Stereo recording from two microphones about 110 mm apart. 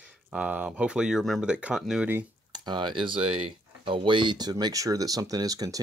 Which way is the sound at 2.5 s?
40° right (ahead or behind).